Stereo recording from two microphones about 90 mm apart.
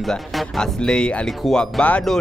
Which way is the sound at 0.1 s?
10° left (ahead or behind).